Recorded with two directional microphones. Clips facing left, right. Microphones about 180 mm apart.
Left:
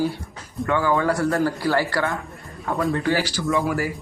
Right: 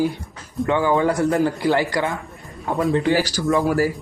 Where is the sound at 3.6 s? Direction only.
40° right (ahead or behind).